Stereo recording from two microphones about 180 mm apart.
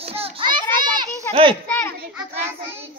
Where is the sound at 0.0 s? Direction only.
35° right (ahead or behind).